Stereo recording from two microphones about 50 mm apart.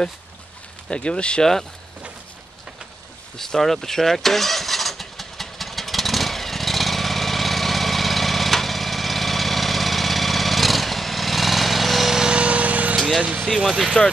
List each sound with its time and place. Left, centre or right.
0.8 s speech: left
1.4 s speech: centre
3.3 s vehicle: centre
12.3 s lawn mower: right
13.2 s speech: centre
13.7 s speech: centre